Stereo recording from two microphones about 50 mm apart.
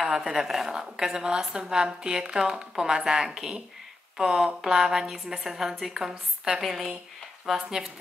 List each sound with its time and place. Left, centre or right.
0.0 s a woman's voice: centre